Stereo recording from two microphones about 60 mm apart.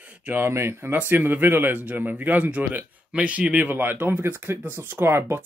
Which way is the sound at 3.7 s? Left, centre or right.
Right.